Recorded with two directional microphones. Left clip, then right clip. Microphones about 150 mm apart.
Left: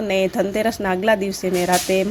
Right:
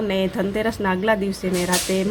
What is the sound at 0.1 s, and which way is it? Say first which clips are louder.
A woman's voice: left 3 dB; 25° left (ahead or behind).